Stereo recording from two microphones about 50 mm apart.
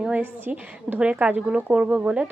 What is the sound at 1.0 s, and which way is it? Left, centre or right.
Speech, right.